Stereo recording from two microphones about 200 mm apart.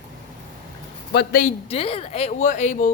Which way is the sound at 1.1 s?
50° left (ahead or behind).